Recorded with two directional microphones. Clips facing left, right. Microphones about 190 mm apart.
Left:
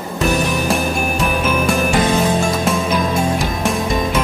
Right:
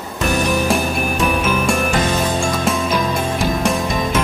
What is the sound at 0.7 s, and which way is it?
Music, centre (ahead or behind).